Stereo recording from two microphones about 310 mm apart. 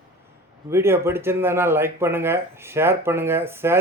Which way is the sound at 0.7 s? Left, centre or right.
Centre.